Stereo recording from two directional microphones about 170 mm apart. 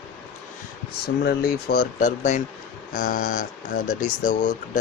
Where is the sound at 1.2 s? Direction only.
65° left (ahead or behind).